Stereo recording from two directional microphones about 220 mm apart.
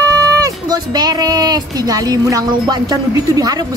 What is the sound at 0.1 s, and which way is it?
Speech, 15° right (ahead or behind).